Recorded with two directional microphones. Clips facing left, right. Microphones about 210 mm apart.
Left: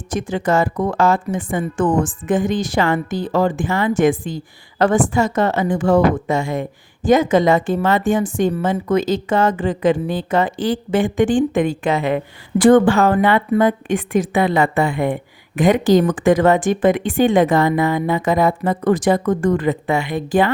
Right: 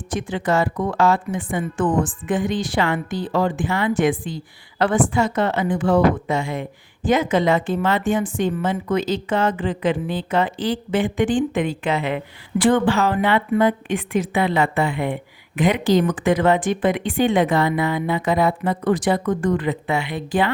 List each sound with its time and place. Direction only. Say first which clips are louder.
0.1 s a woman's voice: left 3 dB; 45° left (ahead or behind)